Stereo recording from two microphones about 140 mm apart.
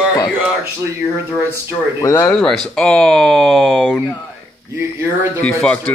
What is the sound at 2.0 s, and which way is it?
Speech, 20° left (ahead or behind).